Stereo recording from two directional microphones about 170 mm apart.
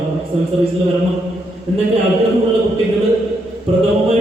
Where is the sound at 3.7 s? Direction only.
35° right (ahead or behind).